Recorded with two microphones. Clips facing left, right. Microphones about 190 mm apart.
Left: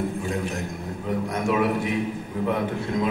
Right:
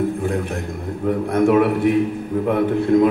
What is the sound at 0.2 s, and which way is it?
A man's voice, 55° right (ahead or behind).